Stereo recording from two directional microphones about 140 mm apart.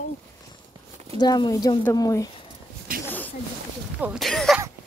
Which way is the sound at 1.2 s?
30° left (ahead or behind).